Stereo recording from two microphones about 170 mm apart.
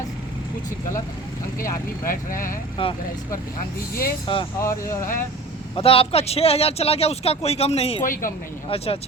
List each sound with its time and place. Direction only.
2.0 s speech: 55° left (ahead or behind)
2.8 s a man's voice: 30° left (ahead or behind)
4.3 s speech: 30° left (ahead or behind)
4.6 s speech: 15° left (ahead or behind)
5.7 s a man's voice: 35° left (ahead or behind)
8.0 s speech: 55° left (ahead or behind)
8.7 s a man's voice: 35° left (ahead or behind)